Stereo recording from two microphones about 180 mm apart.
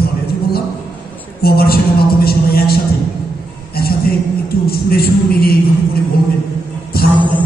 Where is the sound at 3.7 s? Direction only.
60° left (ahead or behind).